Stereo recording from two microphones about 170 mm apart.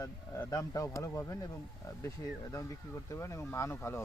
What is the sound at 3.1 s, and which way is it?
Speech, 15° left (ahead or behind).